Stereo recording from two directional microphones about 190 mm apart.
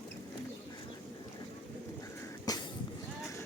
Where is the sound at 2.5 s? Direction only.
20° left (ahead or behind).